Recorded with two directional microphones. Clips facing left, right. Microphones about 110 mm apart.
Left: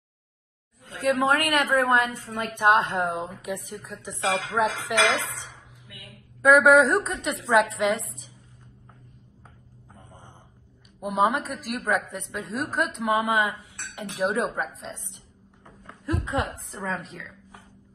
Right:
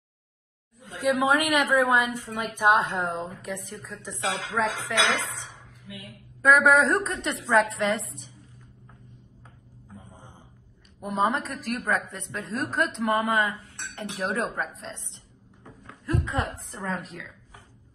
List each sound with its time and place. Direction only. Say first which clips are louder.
0.9 s a woman's voice: even; 15° right (ahead or behind); by 3.3 s centre (ahead or behind)
3.3 s speech: left 2 dB; 15° left (ahead or behind)
5.9 s a woman's voice: right 7 dB; 15° right (ahead or behind)
6.4 s a woman's voice: left 3 dB; centre (ahead or behind)
9.9 s a sound: right 1 dB; 10° right (ahead or behind)
11.0 s a woman's voice: left 2 dB; 10° left (ahead or behind)
16.5 s a woman's voice: left 1 dB; centre (ahead or behind)